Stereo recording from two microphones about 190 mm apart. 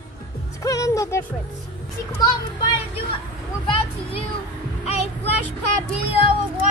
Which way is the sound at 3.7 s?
30° left (ahead or behind).